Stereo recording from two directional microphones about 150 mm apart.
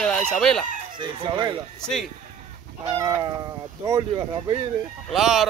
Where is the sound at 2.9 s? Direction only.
20° right (ahead or behind).